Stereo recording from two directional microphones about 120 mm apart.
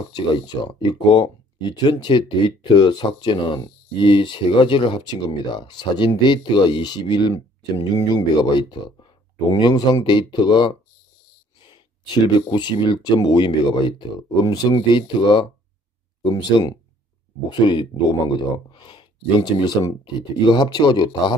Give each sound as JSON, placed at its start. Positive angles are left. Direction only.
{"t": 0.1, "sound": "speech", "side_deg": 40}